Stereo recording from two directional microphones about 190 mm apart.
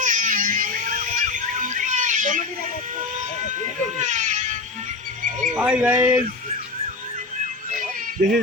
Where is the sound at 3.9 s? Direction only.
40° right (ahead or behind).